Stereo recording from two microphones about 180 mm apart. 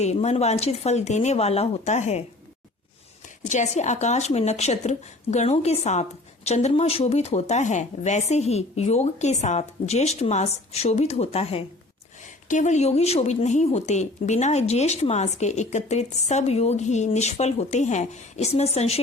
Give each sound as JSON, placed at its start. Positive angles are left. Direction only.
{"t": 0.0, "sound": "speech", "side_deg": 40}
{"t": 3.4, "sound": "speech", "side_deg": 40}